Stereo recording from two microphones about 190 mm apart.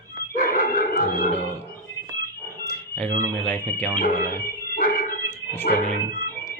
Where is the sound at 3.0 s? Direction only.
5° left (ahead or behind).